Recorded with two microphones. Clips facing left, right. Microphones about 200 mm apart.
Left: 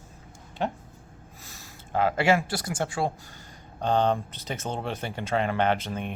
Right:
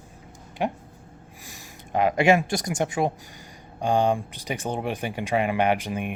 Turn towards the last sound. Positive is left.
turn(degrees=-15)  # may be behind; listen again after turning